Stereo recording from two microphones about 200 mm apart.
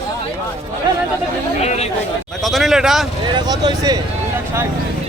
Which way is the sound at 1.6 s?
35° left (ahead or behind).